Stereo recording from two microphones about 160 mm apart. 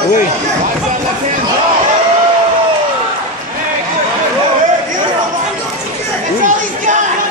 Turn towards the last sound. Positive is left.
turn(degrees=-55)  # may be behind; listen again after turning